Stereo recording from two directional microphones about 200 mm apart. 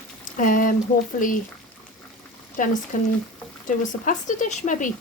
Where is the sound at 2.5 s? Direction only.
40° left (ahead or behind).